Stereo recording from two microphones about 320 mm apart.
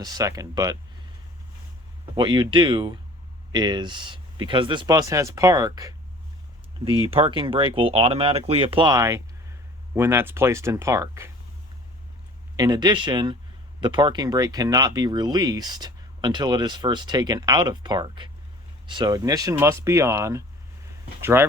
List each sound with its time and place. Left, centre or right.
0.0 s speech: centre
2.1 s speech: centre
12.5 s speech: centre